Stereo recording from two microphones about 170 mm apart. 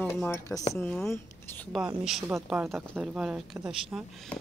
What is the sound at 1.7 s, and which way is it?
Speech, 5° right (ahead or behind).